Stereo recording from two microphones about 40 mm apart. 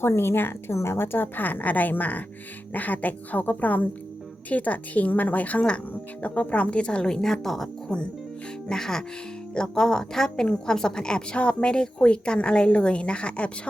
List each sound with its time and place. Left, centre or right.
0.0 s a woman's voice: left
1.4 s a woman's voice: left
7.1 s a woman's voice: centre; by 13.5 s left